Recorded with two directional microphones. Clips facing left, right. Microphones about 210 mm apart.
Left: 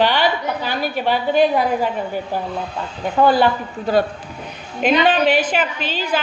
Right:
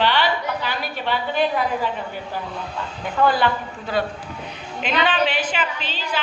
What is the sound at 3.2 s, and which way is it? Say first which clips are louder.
Speech: left 5 dB; 30° left (ahead or behind).